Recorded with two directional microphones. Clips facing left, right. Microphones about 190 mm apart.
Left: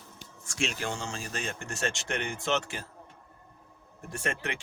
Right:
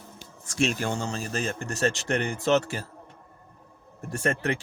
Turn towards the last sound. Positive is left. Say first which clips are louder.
# right 7 dB
turn(degrees=-40)  # may be behind; listen again after turning